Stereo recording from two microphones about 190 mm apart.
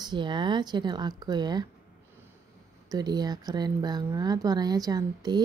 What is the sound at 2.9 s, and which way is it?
A woman's voice, 20° right (ahead or behind).